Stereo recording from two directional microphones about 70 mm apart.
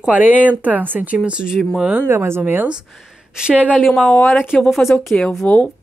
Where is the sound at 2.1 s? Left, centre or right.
Right.